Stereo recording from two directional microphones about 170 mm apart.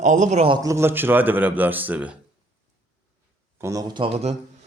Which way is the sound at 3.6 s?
25° right (ahead or behind).